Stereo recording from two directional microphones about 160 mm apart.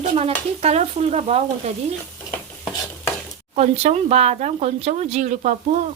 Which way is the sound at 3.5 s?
45° right (ahead or behind).